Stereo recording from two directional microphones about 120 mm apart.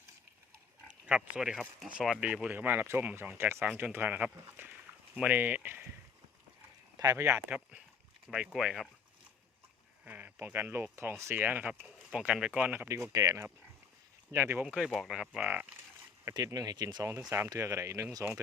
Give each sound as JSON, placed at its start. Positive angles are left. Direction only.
{"t": 0.9, "sound": "speech", "side_deg": -10}
{"t": 7.0, "sound": "speech", "side_deg": -25}
{"t": 7.5, "sound": "speech", "side_deg": -10}
{"t": 10.1, "sound": "sheep", "side_deg": -15}
{"t": 11.2, "sound": "speech", "side_deg": -20}
{"t": 12.9, "sound": "speech", "side_deg": -25}
{"t": 14.6, "sound": "speech", "side_deg": -10}
{"t": 15.4, "sound": "speech", "side_deg": -15}
{"t": 16.3, "sound": "speech", "side_deg": -30}